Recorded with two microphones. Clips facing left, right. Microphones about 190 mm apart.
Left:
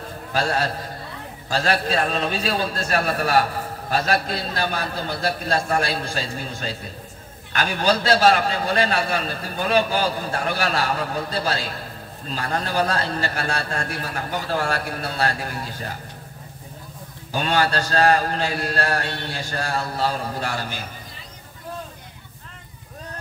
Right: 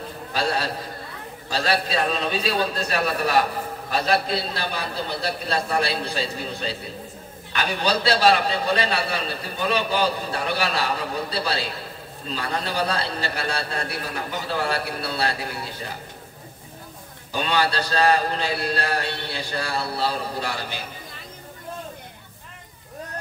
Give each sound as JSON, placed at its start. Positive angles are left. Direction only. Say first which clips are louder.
{"t": 0.3, "sound": "a man's voice", "louder": "left 2 dB", "side_deg": 45}
{"t": 17.3, "sound": "a man's voice", "louder": "left 2 dB", "side_deg": 45}